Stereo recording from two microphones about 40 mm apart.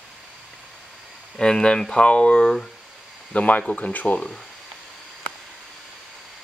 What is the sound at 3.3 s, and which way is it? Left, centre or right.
Speech, left.